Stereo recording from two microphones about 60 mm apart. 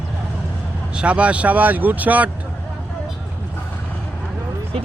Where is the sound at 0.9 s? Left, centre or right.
Centre.